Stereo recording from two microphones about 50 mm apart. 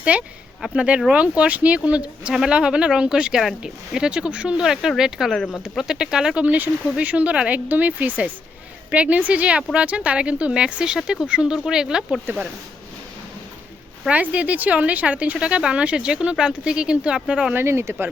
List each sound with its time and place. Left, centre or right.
0.0 s speech: right
4.6 s speech: centre
5.3 s speech: centre
5.6 s speech: centre
6.3 s speech: right
14.1 s speech: right
17.7 s speech: right